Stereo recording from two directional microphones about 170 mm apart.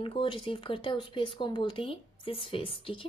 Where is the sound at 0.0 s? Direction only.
30° left (ahead or behind).